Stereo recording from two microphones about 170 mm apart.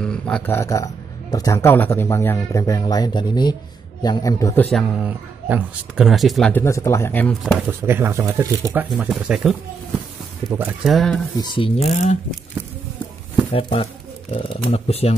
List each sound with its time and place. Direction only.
0.0 s speech: 5° left (ahead or behind)
4.6 s speech: centre (ahead or behind)
6.5 s speech: 15° left (ahead or behind)
7.6 s speech: 15° right (ahead or behind)
10.6 s speech: 5° right (ahead or behind)
11.3 s speech: 30° left (ahead or behind)
13.5 s speech: 35° left (ahead or behind)